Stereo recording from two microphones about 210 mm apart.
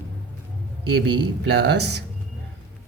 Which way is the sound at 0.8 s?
55° right (ahead or behind).